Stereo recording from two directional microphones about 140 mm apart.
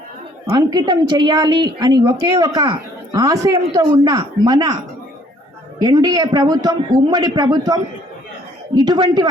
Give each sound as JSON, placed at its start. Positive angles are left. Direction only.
{"t": 0.5, "sound": "a woman's voice", "side_deg": -30}
{"t": 5.8, "sound": "a woman's voice", "side_deg": -25}